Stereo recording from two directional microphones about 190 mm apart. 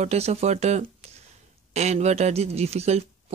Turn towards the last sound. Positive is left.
turn(degrees=-35)  # may be behind; listen again after turning